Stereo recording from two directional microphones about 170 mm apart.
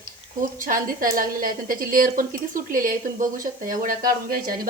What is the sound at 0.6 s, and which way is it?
A woman's voice, 55° right (ahead or behind).